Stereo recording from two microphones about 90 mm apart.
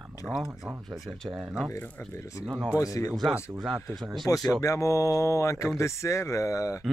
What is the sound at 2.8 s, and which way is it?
Speech, 40° left (ahead or behind).